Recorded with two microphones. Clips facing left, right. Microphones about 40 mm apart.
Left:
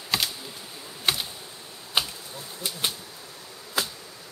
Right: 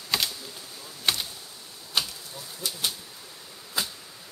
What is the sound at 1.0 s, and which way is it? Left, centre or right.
Computer keyboard, centre.